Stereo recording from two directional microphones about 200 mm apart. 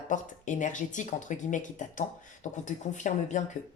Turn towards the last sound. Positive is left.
turn(degrees=35)  # may be behind; listen again after turning